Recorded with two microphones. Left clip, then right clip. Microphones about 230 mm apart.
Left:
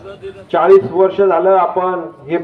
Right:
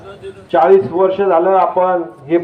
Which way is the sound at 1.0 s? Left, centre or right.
Left.